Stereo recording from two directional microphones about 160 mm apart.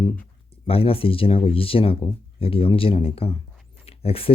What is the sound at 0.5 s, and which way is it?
Speech, 35° left (ahead or behind).